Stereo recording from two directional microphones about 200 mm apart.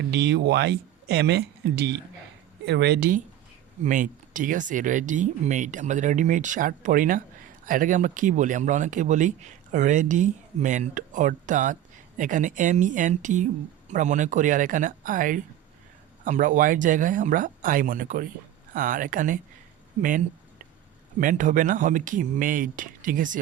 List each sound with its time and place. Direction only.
0.0 s speech: 60° right (ahead or behind); by 23.4 s 40° right (ahead or behind)